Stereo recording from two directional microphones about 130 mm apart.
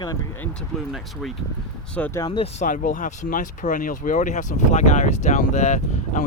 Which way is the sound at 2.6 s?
90° left.